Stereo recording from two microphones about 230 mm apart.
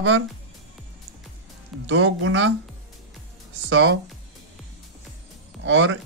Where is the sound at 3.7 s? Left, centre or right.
Right.